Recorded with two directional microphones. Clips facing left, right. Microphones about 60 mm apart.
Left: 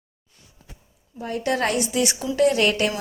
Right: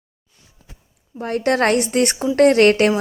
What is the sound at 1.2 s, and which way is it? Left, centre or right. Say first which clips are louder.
A woman's voice: right 6 dB; right.